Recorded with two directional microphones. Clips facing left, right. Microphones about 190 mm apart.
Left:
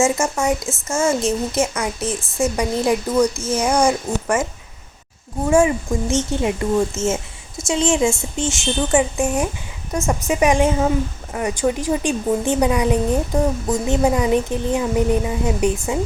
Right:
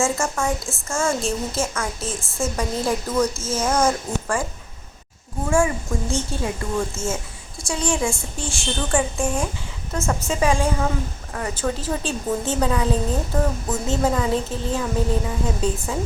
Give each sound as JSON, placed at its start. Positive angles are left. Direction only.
{"t": 0.0, "sound": "a woman's voice", "side_deg": 20}
{"t": 5.5, "sound": "a woman's voice", "side_deg": 20}
{"t": 8.9, "sound": "a woman's voice", "side_deg": 5}
{"t": 10.1, "sound": "a woman's voice", "side_deg": 15}